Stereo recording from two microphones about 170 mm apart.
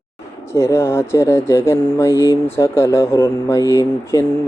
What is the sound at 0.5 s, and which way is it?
Speech, 15° left (ahead or behind).